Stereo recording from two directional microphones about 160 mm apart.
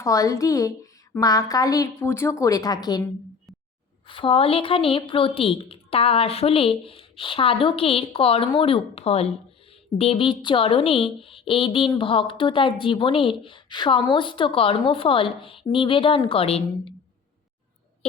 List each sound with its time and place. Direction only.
0.0 s a woman's voice: 20° left (ahead or behind); by 16.9 s 35° left (ahead or behind)